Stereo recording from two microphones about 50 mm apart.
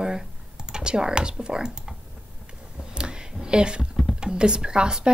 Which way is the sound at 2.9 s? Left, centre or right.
Centre.